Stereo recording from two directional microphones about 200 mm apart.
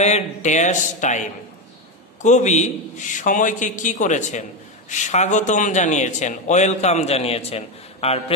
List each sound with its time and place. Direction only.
0.0 s a man's voice: 35° left (ahead or behind)
2.2 s a man's voice: 35° left (ahead or behind)